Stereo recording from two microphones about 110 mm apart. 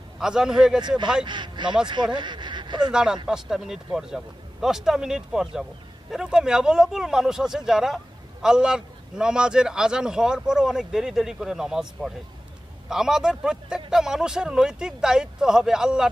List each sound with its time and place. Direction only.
0.2 s speech: 5° right (ahead or behind)
0.8 s speech: 40° right (ahead or behind)
2.9 s speech: 5° right (ahead or behind)